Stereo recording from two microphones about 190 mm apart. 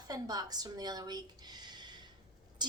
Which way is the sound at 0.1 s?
20° right (ahead or behind).